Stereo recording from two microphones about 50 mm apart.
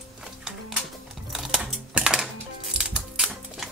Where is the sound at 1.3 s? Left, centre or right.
Centre.